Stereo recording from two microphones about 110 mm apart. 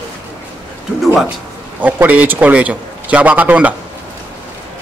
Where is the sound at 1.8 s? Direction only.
15° right (ahead or behind).